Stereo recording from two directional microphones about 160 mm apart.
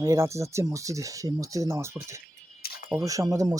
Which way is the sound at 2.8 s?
20° right (ahead or behind).